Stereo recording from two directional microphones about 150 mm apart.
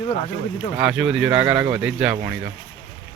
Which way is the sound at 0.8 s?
5° right (ahead or behind).